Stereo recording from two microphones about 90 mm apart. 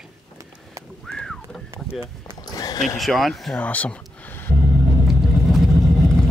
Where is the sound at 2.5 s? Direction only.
45° left (ahead or behind).